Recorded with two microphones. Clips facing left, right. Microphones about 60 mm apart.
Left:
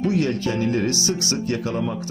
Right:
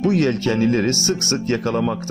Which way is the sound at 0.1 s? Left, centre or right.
Right.